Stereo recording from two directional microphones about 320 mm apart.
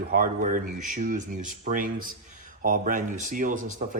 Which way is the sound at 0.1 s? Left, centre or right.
Right.